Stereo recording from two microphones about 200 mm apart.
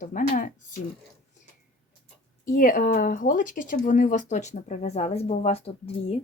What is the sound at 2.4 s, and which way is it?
Speech, 45° left (ahead or behind).